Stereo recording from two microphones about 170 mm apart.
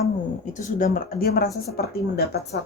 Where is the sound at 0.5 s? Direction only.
50° left (ahead or behind).